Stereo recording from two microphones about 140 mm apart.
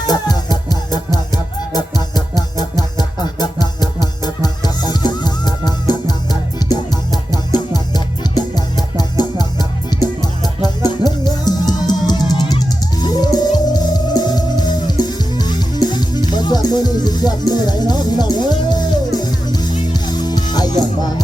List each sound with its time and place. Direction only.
0.5 s music: 30° left (ahead or behind)